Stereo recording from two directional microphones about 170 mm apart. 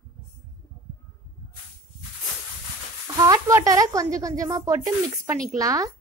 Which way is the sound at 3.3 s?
20° right (ahead or behind).